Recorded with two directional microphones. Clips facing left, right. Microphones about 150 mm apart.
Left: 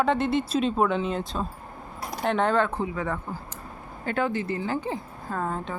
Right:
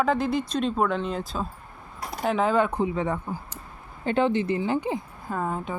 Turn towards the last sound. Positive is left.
turn(degrees=-10)  # may be behind; listen again after turning